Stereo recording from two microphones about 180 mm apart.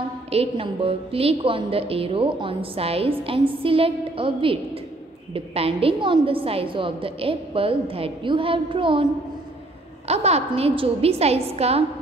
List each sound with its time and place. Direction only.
0.3 s a woman's voice: 30° right (ahead or behind)
10.0 s a woman's voice: 35° right (ahead or behind)